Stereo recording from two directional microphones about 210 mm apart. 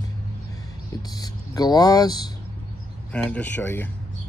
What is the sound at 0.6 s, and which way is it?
Speech, 20° left (ahead or behind).